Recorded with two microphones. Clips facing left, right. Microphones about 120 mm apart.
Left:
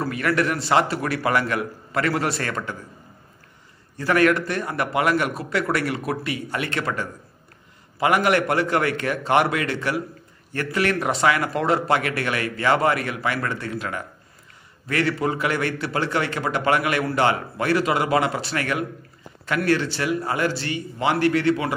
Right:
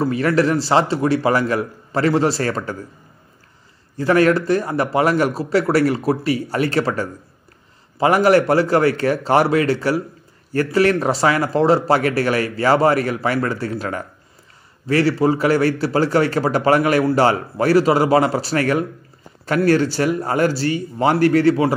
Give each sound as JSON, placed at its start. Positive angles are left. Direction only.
{"t": 0.0, "sound": "a man's voice", "side_deg": -30}
{"t": 3.9, "sound": "a man's voice", "side_deg": -30}